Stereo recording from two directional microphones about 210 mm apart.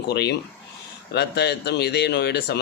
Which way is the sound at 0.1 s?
50° left (ahead or behind).